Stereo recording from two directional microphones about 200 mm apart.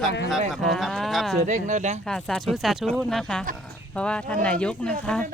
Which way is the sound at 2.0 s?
Centre (ahead or behind).